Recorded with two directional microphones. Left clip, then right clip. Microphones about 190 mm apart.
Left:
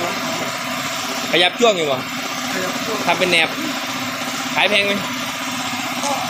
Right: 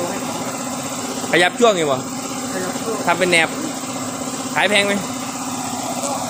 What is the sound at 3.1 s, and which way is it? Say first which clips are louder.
Speech: even; 15° right (ahead or behind).